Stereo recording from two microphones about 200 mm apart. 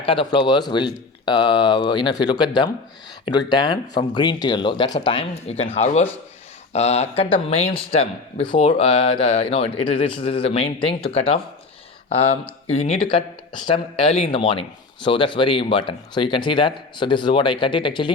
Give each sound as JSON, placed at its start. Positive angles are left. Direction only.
{"t": 0.0, "sound": "speech", "side_deg": 25}